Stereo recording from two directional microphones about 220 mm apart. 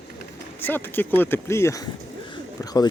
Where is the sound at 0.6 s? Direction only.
10° left (ahead or behind).